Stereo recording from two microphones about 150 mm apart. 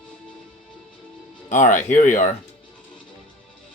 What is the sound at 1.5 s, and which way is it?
Speech, 55° left (ahead or behind).